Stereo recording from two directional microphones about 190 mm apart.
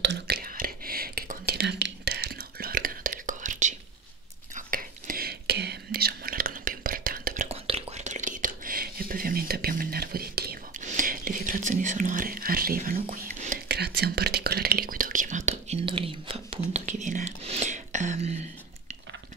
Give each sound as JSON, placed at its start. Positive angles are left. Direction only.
{"t": 0.0, "sound": "whispering", "side_deg": -60}
{"t": 7.4, "sound": "whispering", "side_deg": -35}
{"t": 13.7, "sound": "whispering", "side_deg": -60}
{"t": 16.7, "sound": "whispering", "side_deg": -40}